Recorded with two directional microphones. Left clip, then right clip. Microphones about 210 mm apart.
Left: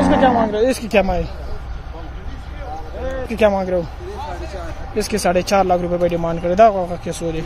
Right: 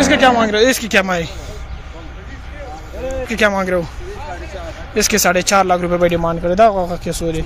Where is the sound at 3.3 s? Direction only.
10° right (ahead or behind).